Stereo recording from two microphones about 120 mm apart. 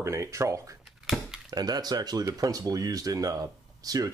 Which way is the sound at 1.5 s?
35° right (ahead or behind).